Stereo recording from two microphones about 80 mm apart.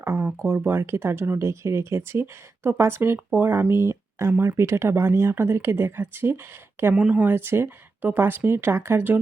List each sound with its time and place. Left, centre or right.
0.0 s a sound: right
0.3 s speech: right
6.9 s speech: centre
7.3 s speech: right